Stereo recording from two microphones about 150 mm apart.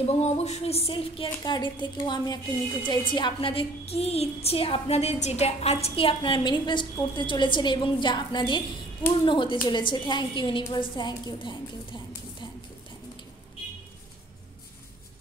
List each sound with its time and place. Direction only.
0.1 s speech: 45° left (ahead or behind)